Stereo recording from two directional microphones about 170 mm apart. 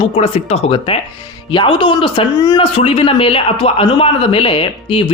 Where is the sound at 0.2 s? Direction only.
40° left (ahead or behind).